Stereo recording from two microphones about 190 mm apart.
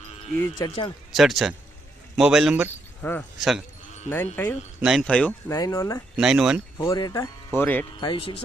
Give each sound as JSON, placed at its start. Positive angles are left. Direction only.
{"t": 0.3, "sound": "speech", "side_deg": 15}
{"t": 1.1, "sound": "speech", "side_deg": 0}
{"t": 3.0, "sound": "speech", "side_deg": 10}
{"t": 4.8, "sound": "speech", "side_deg": 0}
{"t": 5.5, "sound": "speech", "side_deg": 15}
{"t": 6.1, "sound": "speech", "side_deg": -5}
{"t": 6.7, "sound": "speech", "side_deg": 20}
{"t": 7.9, "sound": "speech", "side_deg": 25}